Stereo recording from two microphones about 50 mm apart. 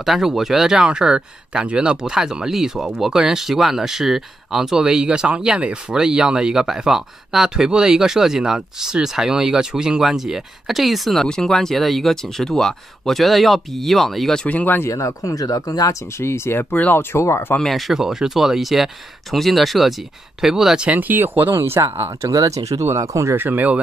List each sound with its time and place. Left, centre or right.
0.0 s speech: centre
11.2 s speech: centre
14.5 s speech: left
14.9 s speech: left
15.9 s speech: left
17.1 s speech: left
17.6 s speech: centre
17.9 s speech: centre
20.8 s speech: right
21.5 s speech: right
23.3 s speech: right